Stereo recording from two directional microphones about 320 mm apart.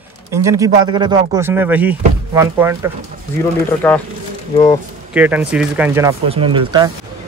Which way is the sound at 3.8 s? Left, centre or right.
Centre.